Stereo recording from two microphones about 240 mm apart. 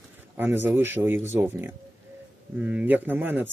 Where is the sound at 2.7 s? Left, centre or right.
Centre.